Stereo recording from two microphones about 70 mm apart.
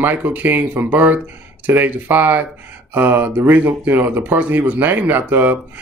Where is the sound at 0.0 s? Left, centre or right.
Right.